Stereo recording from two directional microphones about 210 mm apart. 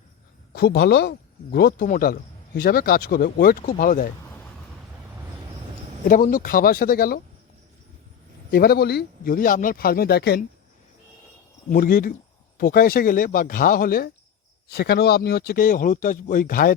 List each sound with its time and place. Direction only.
0.5 s speech: 50° left (ahead or behind)
6.1 s speech: 40° left (ahead or behind)
8.4 s speech: 45° left (ahead or behind)
11.7 s speech: 45° left (ahead or behind)